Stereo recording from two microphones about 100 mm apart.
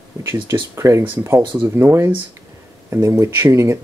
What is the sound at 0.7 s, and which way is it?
Speech, 30° right (ahead or behind).